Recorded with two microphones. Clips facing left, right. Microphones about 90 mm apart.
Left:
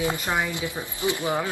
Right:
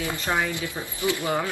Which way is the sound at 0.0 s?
20° left (ahead or behind).